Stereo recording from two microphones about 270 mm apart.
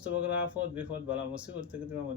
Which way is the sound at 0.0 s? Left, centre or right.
Centre.